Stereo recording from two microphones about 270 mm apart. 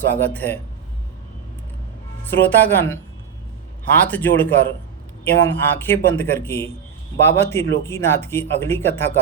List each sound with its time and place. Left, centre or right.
0.2 s speech: centre
2.3 s speech: centre
4.0 s speech: centre